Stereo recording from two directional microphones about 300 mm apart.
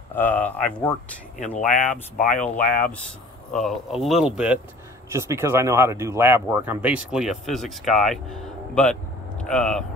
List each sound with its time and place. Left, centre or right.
0.1 s speech: centre
1.6 s speech: left
3.5 s speech: centre